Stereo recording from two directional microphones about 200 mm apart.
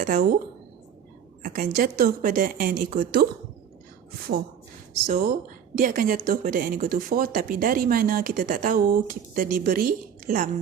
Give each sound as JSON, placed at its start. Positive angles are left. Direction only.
{"t": 0.0, "sound": "speech", "side_deg": -40}
{"t": 1.4, "sound": "speech", "side_deg": -40}
{"t": 5.0, "sound": "speech", "side_deg": -40}